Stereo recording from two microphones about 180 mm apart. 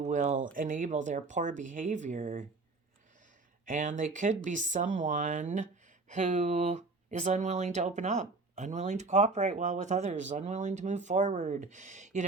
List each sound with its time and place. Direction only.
0.0 s a sound: 45° right (ahead or behind)
0.5 s speech: 50° right (ahead or behind)
3.7 s speech: 45° right (ahead or behind)